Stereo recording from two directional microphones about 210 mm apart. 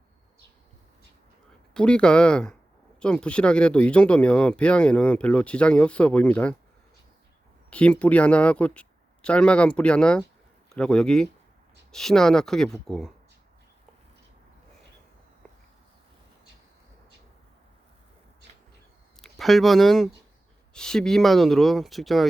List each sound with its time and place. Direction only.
1.7 s speech: 5° left (ahead or behind)
7.7 s speech: 5° left (ahead or behind)
19.2 s speech: centre (ahead or behind)